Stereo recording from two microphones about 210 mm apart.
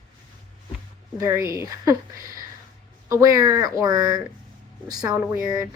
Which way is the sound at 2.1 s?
40° right (ahead or behind).